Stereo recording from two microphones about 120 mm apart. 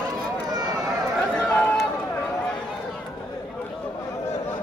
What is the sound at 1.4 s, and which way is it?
Run, 10° left (ahead or behind).